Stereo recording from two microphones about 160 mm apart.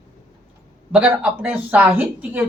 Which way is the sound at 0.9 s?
5° right (ahead or behind).